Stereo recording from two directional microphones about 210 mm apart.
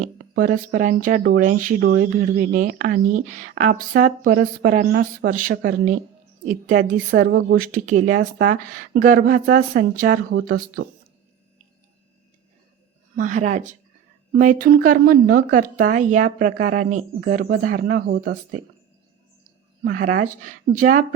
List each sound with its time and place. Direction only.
0.0 s speech: 40° right (ahead or behind)
13.1 s speech: 35° right (ahead or behind)
19.8 s speech: 40° right (ahead or behind)